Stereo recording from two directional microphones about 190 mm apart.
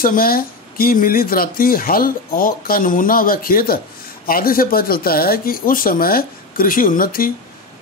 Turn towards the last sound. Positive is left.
turn(degrees=50)  # may be behind; listen again after turning